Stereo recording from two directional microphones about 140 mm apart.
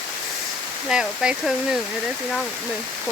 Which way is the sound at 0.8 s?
5° right (ahead or behind).